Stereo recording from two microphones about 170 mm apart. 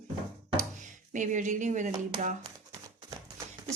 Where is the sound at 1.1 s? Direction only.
45° right (ahead or behind).